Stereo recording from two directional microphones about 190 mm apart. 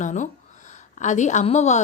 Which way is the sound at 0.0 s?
40° left (ahead or behind).